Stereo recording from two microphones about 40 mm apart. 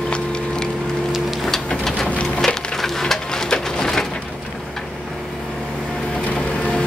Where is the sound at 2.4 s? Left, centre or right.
Centre.